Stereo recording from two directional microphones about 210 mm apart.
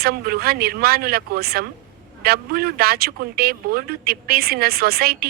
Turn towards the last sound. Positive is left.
turn(degrees=-45)  # may be behind; listen again after turning